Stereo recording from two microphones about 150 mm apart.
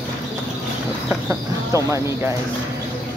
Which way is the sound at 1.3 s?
20° right (ahead or behind).